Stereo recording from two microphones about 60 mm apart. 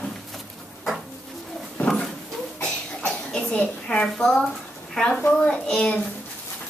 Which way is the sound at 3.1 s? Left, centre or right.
Centre.